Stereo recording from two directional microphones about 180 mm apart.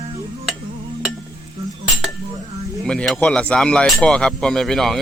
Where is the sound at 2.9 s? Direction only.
5° left (ahead or behind).